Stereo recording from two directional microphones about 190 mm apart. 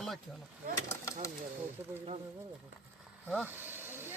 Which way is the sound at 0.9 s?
15° left (ahead or behind).